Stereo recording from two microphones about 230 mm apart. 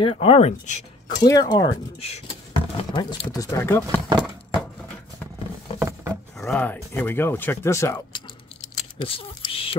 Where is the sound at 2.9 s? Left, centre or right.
Centre.